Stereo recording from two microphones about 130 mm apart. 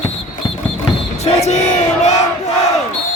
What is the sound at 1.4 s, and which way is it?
Battle cry, 60° left (ahead or behind).